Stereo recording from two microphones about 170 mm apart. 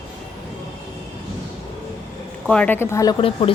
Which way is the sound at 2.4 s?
5° left (ahead or behind).